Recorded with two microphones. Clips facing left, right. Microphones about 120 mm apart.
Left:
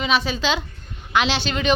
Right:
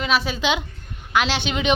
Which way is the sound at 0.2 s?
10° right (ahead or behind).